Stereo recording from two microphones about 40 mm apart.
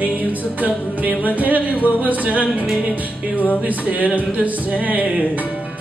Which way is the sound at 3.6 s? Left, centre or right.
Right.